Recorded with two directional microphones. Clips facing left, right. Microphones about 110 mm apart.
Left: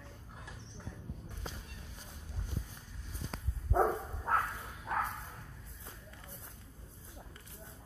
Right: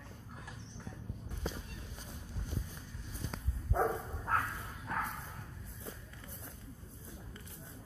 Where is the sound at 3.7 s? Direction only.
15° left (ahead or behind).